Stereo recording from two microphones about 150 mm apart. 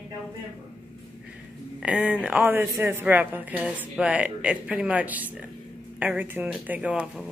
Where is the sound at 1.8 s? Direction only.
10° right (ahead or behind).